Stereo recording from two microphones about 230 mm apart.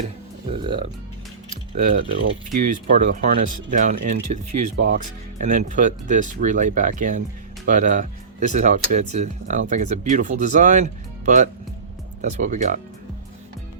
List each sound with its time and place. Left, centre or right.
0.5 s speech: right
1.7 s speech: right